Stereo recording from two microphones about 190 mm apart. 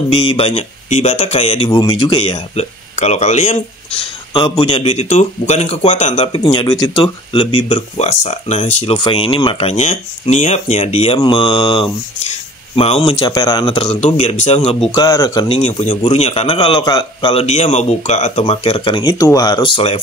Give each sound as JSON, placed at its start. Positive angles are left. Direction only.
{"t": 0.1, "sound": "speech", "side_deg": 30}
{"t": 4.3, "sound": "speech", "side_deg": 25}
{"t": 13.3, "sound": "speech", "side_deg": 20}
{"t": 14.0, "sound": "speech", "side_deg": 35}
{"t": 14.9, "sound": "speech", "side_deg": 15}
{"t": 15.4, "sound": "speech", "side_deg": 35}